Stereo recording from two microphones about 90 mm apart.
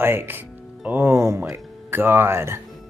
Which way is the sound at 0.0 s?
25° right (ahead or behind).